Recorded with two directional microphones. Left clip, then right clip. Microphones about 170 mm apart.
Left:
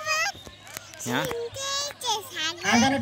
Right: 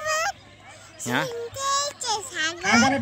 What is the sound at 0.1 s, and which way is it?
Honk, 45° right (ahead or behind).